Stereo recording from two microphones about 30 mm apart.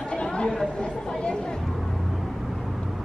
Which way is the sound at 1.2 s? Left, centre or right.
Left.